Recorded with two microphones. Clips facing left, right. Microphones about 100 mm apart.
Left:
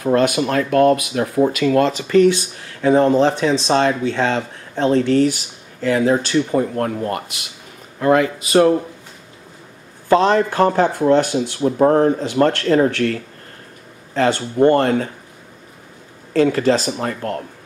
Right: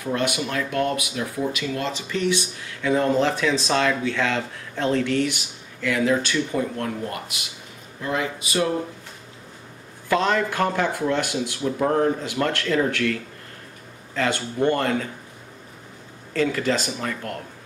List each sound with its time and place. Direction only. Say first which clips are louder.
0.0 s speech: left 9 dB; 45° left (ahead or behind)
8.0 s speech: left 11 dB; 65° left (ahead or behind)
10.0 s speech: left 7 dB; 35° left (ahead or behind)
16.3 s speech: left 7 dB; 40° left (ahead or behind)